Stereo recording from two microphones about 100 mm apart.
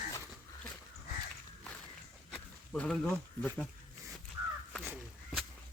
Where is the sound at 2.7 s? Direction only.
5° left (ahead or behind).